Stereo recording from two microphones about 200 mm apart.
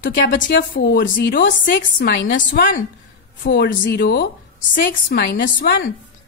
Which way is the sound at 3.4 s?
55° left (ahead or behind).